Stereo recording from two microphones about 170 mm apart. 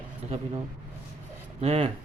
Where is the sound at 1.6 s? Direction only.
40° right (ahead or behind).